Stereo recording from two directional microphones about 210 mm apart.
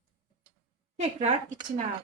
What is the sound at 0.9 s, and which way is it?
Speech, 30° right (ahead or behind).